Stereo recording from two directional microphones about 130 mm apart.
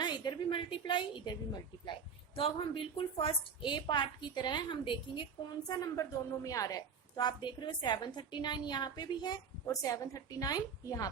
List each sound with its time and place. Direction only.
0.0 s a woman's voice: 35° left (ahead or behind)